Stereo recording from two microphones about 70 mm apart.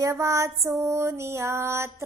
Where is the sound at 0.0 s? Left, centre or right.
Right.